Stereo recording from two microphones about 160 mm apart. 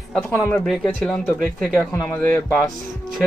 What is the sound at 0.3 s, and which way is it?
Speech, 15° left (ahead or behind).